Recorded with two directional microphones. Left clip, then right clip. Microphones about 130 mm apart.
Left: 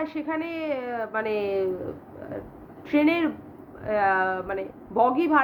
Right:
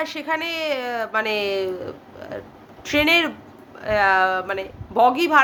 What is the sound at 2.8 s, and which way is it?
A woman's voice, 20° right (ahead or behind).